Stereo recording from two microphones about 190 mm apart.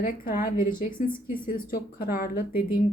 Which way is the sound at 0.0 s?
50° left (ahead or behind).